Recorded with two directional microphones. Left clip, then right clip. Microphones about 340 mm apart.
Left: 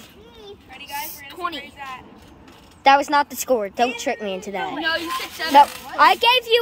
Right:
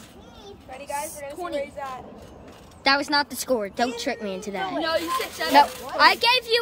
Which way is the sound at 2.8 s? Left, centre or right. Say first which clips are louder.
Left 6 dB; centre.